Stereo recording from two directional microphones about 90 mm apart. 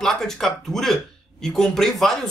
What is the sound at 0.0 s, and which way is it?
Speech, 5° left (ahead or behind).